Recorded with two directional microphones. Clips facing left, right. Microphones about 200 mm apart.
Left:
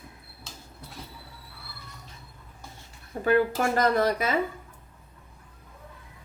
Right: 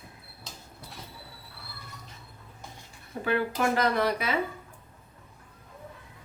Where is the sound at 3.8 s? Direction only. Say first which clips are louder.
Left 3 dB; 45° left (ahead or behind).